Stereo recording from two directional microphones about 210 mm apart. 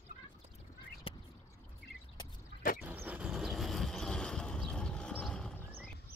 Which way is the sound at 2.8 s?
10° right (ahead or behind).